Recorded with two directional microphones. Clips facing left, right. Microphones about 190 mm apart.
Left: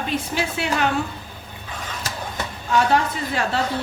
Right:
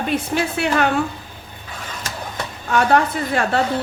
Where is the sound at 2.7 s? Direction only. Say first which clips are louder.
Right 3 dB; 55° right (ahead or behind).